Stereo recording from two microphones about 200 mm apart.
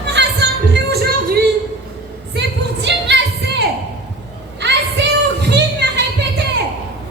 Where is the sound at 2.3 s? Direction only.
60° right (ahead or behind).